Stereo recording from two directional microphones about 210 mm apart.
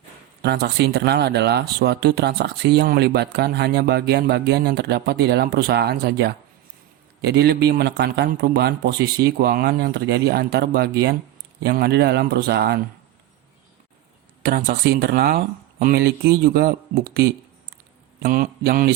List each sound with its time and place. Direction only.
0.4 s speech: 50° right (ahead or behind)
14.4 s speech: 45° right (ahead or behind)